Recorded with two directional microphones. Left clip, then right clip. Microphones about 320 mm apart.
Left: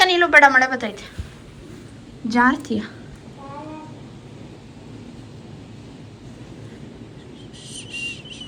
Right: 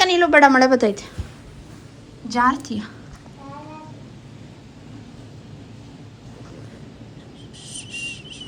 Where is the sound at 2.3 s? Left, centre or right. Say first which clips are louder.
Left 1 dB; centre.